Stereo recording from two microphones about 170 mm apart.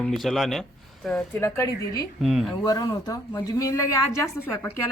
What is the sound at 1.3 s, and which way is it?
Speech, 15° left (ahead or behind).